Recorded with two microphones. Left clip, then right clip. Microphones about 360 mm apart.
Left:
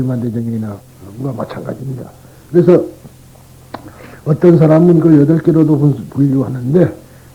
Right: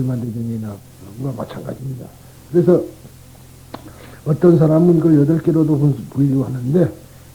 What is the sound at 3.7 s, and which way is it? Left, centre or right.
Speech, right.